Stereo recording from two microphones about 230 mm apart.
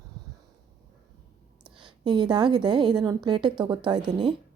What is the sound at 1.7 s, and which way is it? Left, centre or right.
A woman's voice, right.